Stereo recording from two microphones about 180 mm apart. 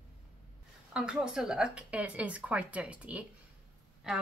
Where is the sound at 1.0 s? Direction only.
5° right (ahead or behind).